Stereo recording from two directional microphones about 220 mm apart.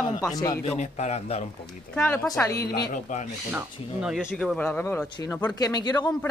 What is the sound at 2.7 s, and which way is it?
Speech, 45° left (ahead or behind).